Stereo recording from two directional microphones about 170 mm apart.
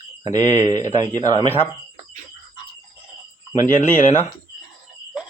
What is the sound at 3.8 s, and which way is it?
Speech, 45° left (ahead or behind).